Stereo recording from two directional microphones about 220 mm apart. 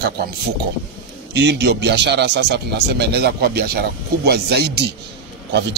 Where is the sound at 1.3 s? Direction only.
50° right (ahead or behind).